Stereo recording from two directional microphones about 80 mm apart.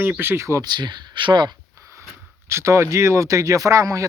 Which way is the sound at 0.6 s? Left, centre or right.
Right.